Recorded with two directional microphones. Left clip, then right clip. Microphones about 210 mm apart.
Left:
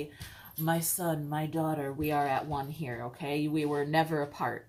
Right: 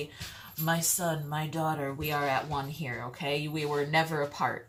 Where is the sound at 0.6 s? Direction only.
20° left (ahead or behind).